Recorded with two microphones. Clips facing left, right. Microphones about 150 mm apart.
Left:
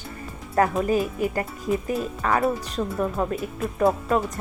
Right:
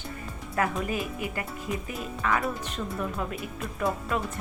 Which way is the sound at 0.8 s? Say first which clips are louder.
Left 8 dB; 40° left (ahead or behind).